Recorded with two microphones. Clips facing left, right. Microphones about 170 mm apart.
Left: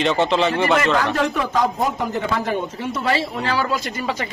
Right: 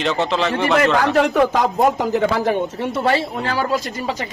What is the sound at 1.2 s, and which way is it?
A man's voice, 75° right (ahead or behind).